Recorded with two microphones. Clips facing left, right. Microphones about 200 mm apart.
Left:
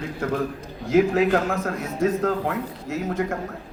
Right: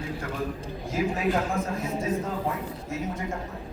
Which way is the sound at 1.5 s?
75° left (ahead or behind).